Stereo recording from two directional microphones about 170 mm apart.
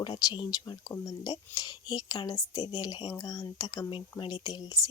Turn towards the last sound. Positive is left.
turn(degrees=25)  # may be behind; listen again after turning